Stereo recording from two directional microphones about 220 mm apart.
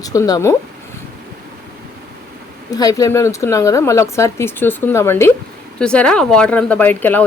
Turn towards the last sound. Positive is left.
turn(degrees=10)  # may be behind; listen again after turning